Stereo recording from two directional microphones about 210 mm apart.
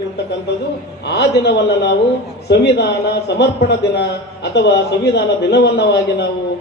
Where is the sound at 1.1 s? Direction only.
55° left (ahead or behind).